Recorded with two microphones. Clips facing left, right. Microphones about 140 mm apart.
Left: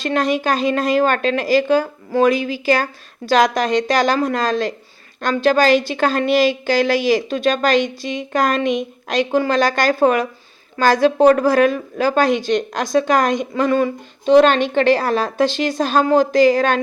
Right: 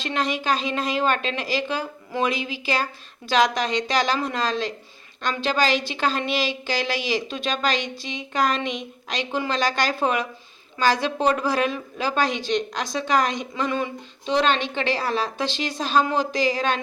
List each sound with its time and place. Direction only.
0.0 s a woman's voice: 45° left (ahead or behind)